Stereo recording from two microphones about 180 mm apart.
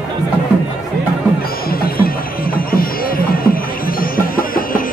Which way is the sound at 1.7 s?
55° left (ahead or behind).